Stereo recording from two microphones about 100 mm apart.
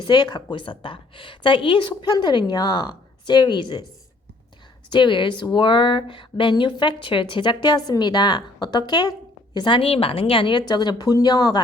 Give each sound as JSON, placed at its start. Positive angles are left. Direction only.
{"t": 0.0, "sound": "a woman's voice", "side_deg": 50}
{"t": 4.9, "sound": "a woman's voice", "side_deg": 50}
{"t": 10.7, "sound": "a woman's voice", "side_deg": 45}